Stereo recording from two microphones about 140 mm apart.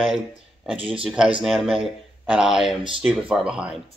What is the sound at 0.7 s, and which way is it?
Speech, 40° right (ahead or behind).